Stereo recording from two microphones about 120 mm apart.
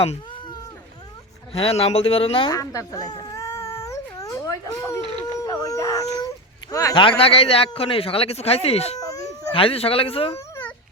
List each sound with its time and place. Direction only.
1.5 s a man's voice: 55° left (ahead or behind)
2.5 s cat: 30° left (ahead or behind)
5.4 s a sound: 30° left (ahead or behind)
6.9 s a man's voice: 50° left (ahead or behind)
9.0 s a sound: 30° left (ahead or behind)
9.6 s a man's voice: 50° left (ahead or behind)